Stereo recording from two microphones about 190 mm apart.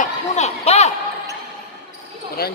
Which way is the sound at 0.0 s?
35° left (ahead or behind).